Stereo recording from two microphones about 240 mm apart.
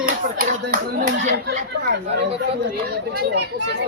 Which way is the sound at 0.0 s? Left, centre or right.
Right.